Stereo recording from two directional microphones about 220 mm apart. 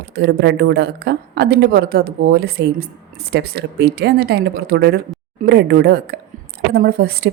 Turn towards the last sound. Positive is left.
turn(degrees=-45)  # may be behind; listen again after turning